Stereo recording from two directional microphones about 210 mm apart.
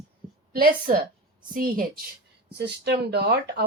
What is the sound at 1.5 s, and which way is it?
Speech, 45° right (ahead or behind).